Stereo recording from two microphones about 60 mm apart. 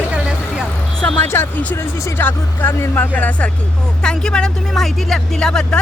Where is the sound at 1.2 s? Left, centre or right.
Left.